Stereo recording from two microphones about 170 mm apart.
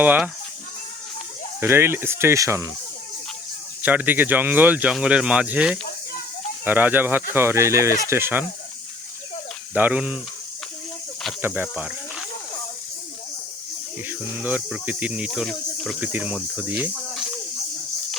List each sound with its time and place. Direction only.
0.0 s speech: 10° right (ahead or behind)
1.6 s speech: 15° right (ahead or behind)
3.8 s speech: 10° right (ahead or behind)
9.7 s speech: 10° right (ahead or behind)
11.4 s speech: 10° right (ahead or behind)
14.1 s speech: 10° right (ahead or behind)
16.0 s speech: 10° right (ahead or behind)